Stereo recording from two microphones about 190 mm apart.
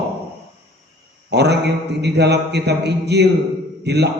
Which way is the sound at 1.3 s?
60° right (ahead or behind).